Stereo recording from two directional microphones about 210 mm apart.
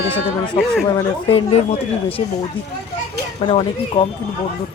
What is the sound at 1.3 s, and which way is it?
Speech, 25° left (ahead or behind).